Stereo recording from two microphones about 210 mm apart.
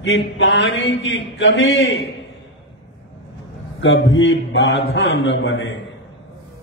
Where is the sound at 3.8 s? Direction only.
60° left (ahead or behind).